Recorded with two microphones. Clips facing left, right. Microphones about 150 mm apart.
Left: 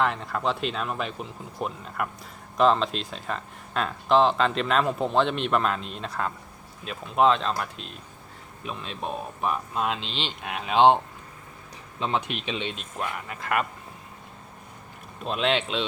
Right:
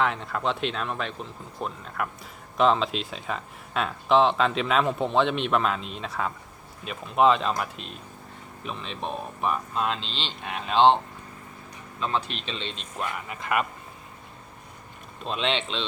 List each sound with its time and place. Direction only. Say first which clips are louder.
0.0 s speech: even; centre (ahead or behind)
11.9 s speech: left 1 dB; 20° left (ahead or behind)
12.3 s speech: left 4 dB; 10° left (ahead or behind)
15.2 s speech: left 2 dB; 5° left (ahead or behind)